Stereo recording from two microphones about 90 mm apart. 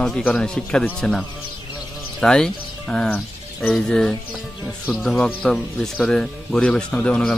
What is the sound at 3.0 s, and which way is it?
Music, 15° left (ahead or behind).